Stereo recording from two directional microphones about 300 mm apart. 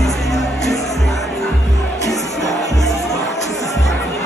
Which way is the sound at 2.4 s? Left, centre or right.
Centre.